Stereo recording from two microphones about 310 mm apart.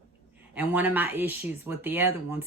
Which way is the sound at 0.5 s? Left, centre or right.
Centre.